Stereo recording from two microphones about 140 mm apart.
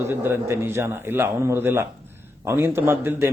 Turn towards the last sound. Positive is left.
turn(degrees=-15)  # may be behind; listen again after turning